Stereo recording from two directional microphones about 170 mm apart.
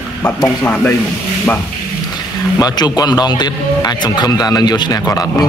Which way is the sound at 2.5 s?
25° left (ahead or behind).